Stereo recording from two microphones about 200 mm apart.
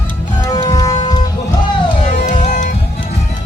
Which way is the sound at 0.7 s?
20° left (ahead or behind).